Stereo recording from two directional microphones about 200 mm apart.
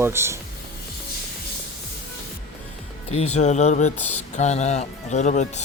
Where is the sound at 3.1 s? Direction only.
30° left (ahead or behind).